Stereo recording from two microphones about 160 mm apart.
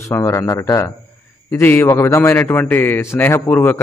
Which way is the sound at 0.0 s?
15° left (ahead or behind).